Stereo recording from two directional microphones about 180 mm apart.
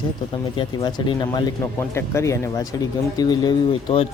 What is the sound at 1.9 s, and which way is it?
Speech, 15° left (ahead or behind).